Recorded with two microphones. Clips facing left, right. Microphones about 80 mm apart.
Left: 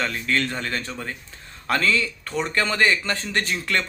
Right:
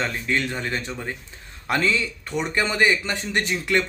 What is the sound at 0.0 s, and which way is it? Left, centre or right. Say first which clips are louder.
Speech: even; right.